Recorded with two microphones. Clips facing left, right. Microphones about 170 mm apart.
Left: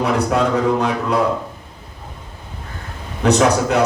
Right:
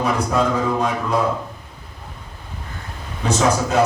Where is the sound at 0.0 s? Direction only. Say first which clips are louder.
Left 2 dB; 70° left (ahead or behind).